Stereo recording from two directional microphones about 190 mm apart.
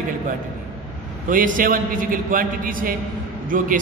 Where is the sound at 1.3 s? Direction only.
45° right (ahead or behind).